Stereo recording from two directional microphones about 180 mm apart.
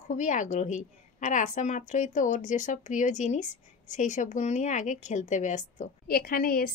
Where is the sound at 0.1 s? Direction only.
45° left (ahead or behind).